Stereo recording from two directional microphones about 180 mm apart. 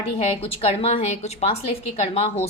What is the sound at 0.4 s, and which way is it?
A woman's voice, 35° left (ahead or behind).